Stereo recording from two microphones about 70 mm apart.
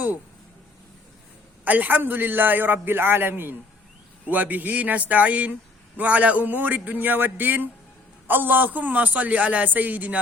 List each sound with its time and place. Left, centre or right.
1.6 s a man's voice: right